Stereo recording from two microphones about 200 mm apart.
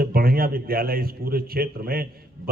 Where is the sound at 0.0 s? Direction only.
45° right (ahead or behind).